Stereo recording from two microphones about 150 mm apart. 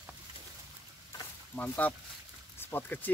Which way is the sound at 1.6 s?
10° left (ahead or behind).